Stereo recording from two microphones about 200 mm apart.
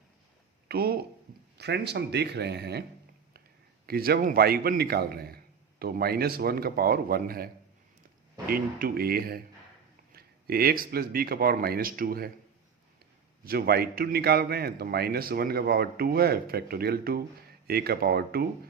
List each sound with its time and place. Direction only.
0.7 s a man's voice: 50° right (ahead or behind)
3.8 s a man's voice: 50° right (ahead or behind)
13.4 s a man's voice: 50° right (ahead or behind)